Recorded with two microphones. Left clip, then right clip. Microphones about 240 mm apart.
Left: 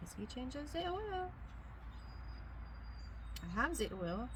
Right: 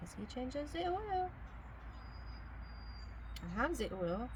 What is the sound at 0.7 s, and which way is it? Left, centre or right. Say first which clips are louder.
Speech: right 2 dB; centre.